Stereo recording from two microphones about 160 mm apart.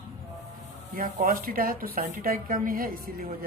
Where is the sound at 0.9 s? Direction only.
60° right (ahead or behind).